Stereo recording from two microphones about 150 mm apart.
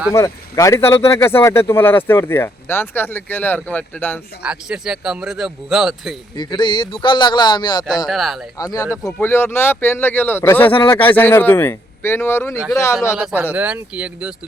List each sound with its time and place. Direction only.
0.1 s speech: 20° left (ahead or behind)
4.4 s a man's voice: 5° right (ahead or behind)
6.3 s speech: 30° left (ahead or behind)
8.0 s a man's voice: centre (ahead or behind)
8.5 s speech: 25° left (ahead or behind)
10.7 s speech: 35° left (ahead or behind)
10.9 s speech: 10° left (ahead or behind)
13.1 s speech: 5° right (ahead or behind)